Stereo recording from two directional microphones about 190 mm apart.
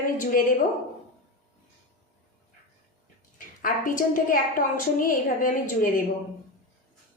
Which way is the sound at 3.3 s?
45° left (ahead or behind).